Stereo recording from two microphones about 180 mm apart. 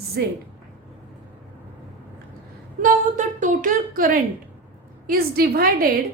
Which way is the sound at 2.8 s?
45° right (ahead or behind).